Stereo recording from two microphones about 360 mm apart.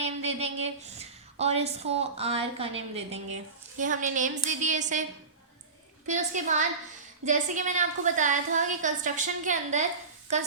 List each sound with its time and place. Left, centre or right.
0.0 s a sound: centre
1.4 s a woman's voice: centre
6.1 s a woman's voice: centre